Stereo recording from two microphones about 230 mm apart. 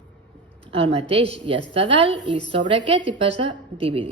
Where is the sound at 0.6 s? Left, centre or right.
Right.